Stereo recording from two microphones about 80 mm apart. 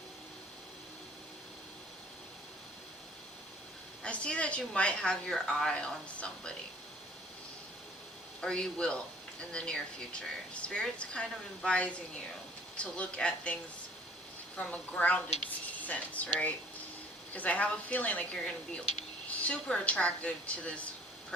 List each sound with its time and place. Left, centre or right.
4.0 s a woman's voice: centre
8.4 s a woman's voice: centre